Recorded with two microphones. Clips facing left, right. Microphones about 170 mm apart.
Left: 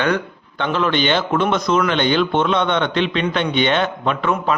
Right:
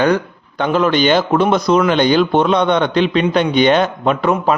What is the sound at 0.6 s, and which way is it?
A man's voice, 40° right (ahead or behind).